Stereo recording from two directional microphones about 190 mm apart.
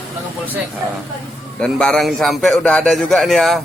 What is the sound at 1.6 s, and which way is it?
Speech, 5° left (ahead or behind).